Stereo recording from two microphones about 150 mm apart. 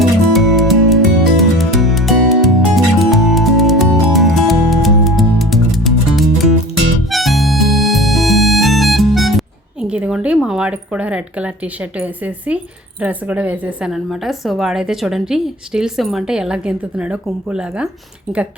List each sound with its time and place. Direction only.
0.0 s music: centre (ahead or behind)
7.1 s harmonica: centre (ahead or behind)
13.0 s a woman's voice: 10° right (ahead or behind)